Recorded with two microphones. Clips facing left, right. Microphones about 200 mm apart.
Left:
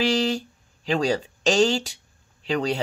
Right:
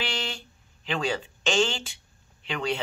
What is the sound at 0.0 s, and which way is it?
Speech, 40° left (ahead or behind).